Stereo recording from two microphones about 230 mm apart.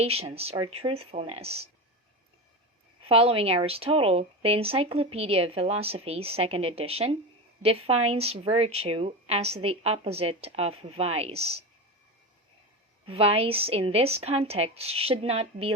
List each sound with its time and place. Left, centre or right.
0.0 s speech: right
3.0 s speech: right
13.1 s speech: right